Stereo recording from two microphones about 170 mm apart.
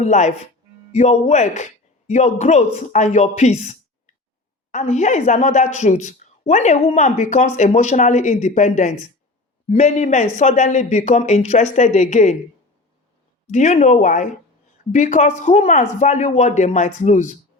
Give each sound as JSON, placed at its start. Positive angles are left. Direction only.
{"t": 0.0, "sound": "speech", "side_deg": 40}
{"t": 13.5, "sound": "speech", "side_deg": 45}